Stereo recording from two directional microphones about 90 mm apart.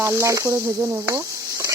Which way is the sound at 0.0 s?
30° right (ahead or behind).